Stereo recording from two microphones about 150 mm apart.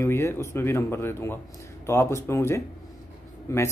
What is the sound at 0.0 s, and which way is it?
Speech, 15° left (ahead or behind).